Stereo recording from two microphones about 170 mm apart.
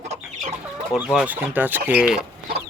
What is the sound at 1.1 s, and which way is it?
Speech, 10° right (ahead or behind).